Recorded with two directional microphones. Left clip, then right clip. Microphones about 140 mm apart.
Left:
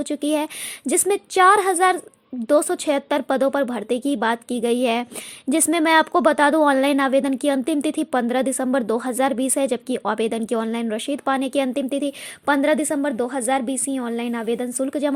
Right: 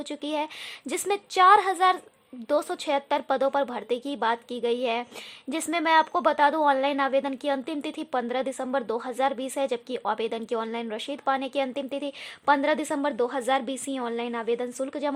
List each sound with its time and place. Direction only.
0.0 s a woman's voice: 25° left (ahead or behind)